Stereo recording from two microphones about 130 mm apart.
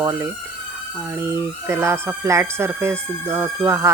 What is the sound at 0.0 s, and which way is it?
Speech, 25° right (ahead or behind).